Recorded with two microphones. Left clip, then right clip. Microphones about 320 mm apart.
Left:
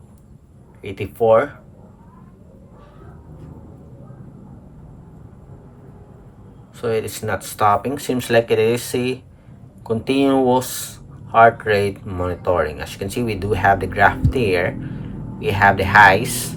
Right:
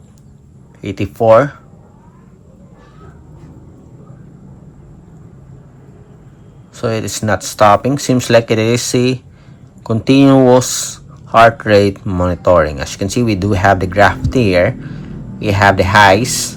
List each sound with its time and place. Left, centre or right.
0.8 s speech: centre
6.7 s speech: centre
10.6 s speech: centre